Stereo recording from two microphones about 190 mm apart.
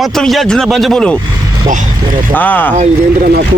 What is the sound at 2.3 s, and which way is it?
Speech, 10° left (ahead or behind).